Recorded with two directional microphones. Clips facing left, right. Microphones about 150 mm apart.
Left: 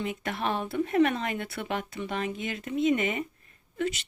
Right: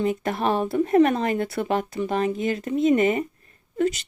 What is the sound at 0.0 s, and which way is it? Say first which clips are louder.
Speech: right 8 dB; 40° right (ahead or behind).